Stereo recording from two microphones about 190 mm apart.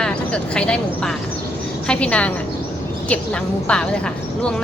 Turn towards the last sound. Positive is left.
turn(degrees=5)  # may be behind; listen again after turning